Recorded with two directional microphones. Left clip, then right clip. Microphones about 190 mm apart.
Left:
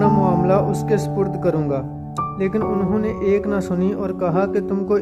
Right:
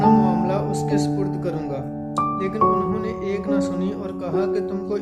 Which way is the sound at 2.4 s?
45° left (ahead or behind).